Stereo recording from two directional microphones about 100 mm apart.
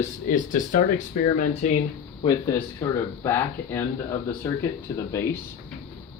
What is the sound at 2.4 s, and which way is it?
Speech, 30° left (ahead or behind).